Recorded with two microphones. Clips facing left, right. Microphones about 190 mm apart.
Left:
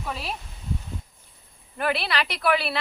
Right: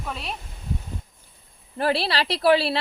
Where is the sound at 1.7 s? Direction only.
30° right (ahead or behind).